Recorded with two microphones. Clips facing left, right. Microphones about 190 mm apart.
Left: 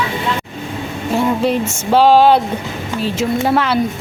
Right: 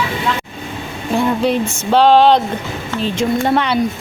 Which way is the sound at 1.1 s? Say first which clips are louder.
Even; 5° left (ahead or behind).